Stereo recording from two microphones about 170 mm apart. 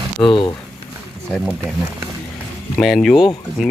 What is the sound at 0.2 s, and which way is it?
Speech, 30° left (ahead or behind).